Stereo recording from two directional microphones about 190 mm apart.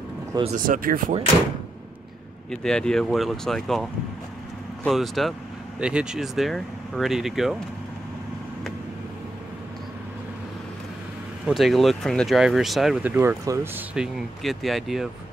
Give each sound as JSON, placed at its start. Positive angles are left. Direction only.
{"t": 0.4, "sound": "speech", "side_deg": -45}
{"t": 2.5, "sound": "speech", "side_deg": 5}
{"t": 4.8, "sound": "speech", "side_deg": 0}
{"t": 11.4, "sound": "speech", "side_deg": 0}